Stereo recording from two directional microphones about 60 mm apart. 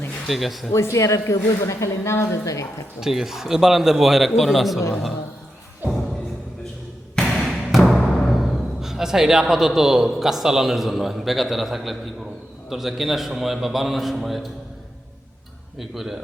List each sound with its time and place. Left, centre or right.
0.3 s a man's voice: centre
0.7 s a woman's voice: left
3.0 s a man's voice: centre
7.2 s basketball bounce: centre
7.9 s music: centre
8.3 s a man's voice: centre
15.8 s a man's voice: centre